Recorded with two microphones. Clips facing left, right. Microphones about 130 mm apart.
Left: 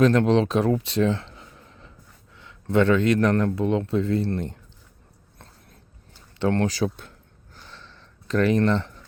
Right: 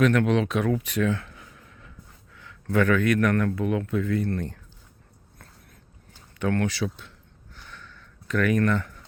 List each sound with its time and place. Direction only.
0.0 s speech: 30° left (ahead or behind)
6.4 s speech: 30° left (ahead or behind); by 7.1 s 45° left (ahead or behind)
7.5 s a sound: 30° left (ahead or behind)